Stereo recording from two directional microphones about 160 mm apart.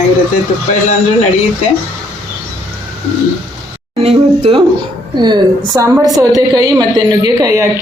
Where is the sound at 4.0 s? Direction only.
40° right (ahead or behind).